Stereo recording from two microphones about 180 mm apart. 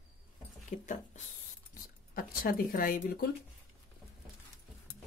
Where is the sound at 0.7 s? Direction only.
45° left (ahead or behind).